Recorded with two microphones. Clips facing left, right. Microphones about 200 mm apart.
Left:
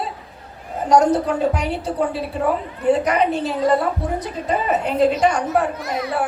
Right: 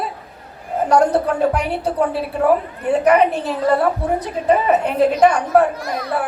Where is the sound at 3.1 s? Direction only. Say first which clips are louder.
Right 4 dB; 60° right (ahead or behind).